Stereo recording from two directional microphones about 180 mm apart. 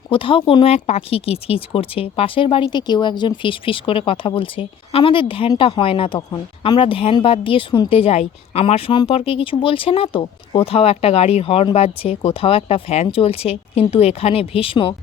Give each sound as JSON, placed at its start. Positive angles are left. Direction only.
{"t": 0.1, "sound": "speech", "side_deg": 30}